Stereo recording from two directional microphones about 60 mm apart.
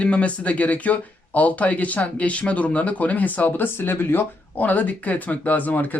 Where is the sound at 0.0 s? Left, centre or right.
Left.